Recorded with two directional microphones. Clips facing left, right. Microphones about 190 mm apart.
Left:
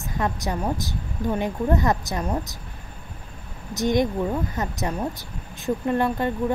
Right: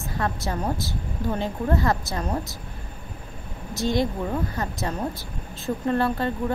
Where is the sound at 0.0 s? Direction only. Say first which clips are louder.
Left 1 dB; 15° left (ahead or behind).